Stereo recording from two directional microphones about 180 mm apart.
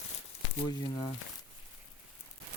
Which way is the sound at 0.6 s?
20° left (ahead or behind).